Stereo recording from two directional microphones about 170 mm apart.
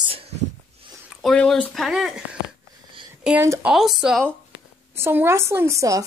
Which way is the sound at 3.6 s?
Centre (ahead or behind).